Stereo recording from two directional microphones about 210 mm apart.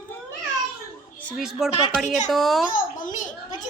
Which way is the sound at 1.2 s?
Centre (ahead or behind).